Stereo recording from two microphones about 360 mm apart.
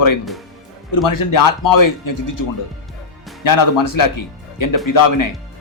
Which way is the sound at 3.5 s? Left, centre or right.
Left.